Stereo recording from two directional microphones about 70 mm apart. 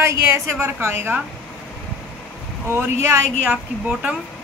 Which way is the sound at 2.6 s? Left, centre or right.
Right.